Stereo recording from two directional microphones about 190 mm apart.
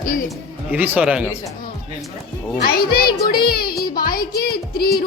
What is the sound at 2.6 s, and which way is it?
Speech, 55° left (ahead or behind).